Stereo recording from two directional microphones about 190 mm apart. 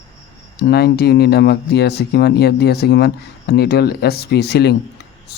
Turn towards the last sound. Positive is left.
turn(degrees=60)  # may be behind; listen again after turning